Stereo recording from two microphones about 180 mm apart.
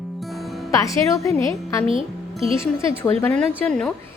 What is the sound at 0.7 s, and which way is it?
Speech, 15° left (ahead or behind).